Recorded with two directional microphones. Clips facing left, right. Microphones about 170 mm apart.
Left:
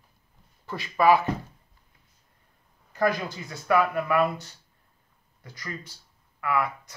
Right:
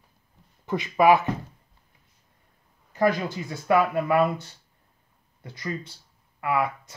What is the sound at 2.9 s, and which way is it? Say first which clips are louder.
Speech: right 2 dB; 25° right (ahead or behind).